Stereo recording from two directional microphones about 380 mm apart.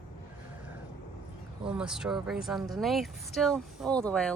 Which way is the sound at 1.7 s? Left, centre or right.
Centre.